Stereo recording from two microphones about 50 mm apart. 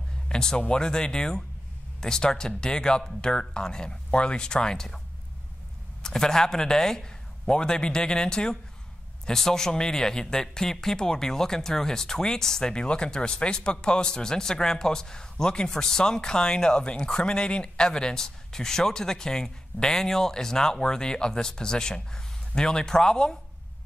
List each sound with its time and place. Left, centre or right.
0.3 s speech: centre
6.0 s speech: centre